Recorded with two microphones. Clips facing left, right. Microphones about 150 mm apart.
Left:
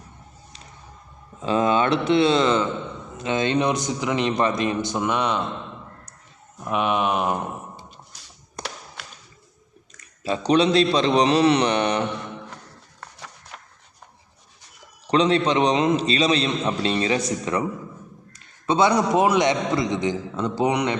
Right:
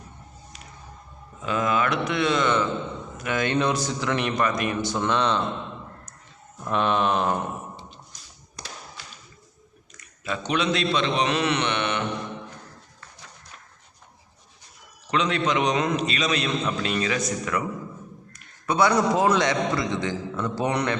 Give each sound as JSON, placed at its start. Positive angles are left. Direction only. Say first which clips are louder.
{"t": 1.4, "sound": "a man's voice", "louder": "left 4 dB", "side_deg": 30}
{"t": 6.7, "sound": "speech", "louder": "left 1 dB", "side_deg": 10}
{"t": 8.6, "sound": "tap", "louder": "left 7 dB", "side_deg": 50}
{"t": 10.2, "sound": "a man's voice", "louder": "left 6 dB", "side_deg": 35}
{"t": 13.0, "sound": "a sound", "louder": "left 6 dB", "side_deg": 75}
{"t": 15.0, "sound": "a man's voice", "louder": "left 5 dB", "side_deg": 35}